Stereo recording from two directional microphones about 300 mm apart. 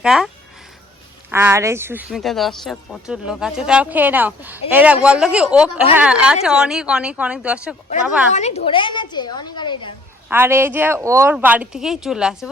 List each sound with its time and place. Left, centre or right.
0.0 s speech: centre
1.3 s speech: centre
8.3 s a woman's voice: left
10.2 s speech: centre